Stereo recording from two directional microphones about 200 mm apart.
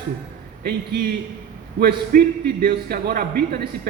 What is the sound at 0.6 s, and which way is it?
A man's voice, 55° right (ahead or behind).